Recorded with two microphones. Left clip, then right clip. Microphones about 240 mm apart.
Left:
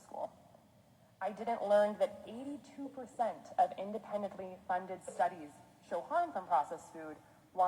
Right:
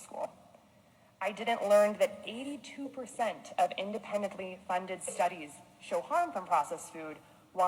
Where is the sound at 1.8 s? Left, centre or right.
Right.